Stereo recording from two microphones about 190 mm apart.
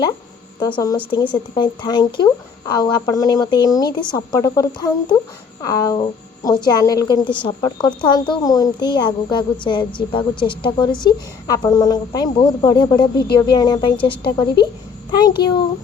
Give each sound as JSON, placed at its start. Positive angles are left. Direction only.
{"t": 0.6, "sound": "a woman's voice", "side_deg": 20}